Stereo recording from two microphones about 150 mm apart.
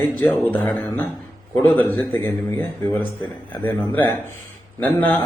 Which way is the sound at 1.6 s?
15° left (ahead or behind).